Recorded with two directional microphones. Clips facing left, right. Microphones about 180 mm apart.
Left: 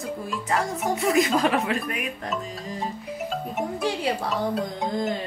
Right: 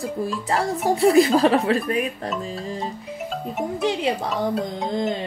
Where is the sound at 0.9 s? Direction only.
35° right (ahead or behind).